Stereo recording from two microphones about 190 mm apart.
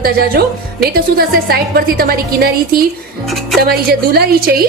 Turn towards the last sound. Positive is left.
turn(degrees=-55)  # may be behind; listen again after turning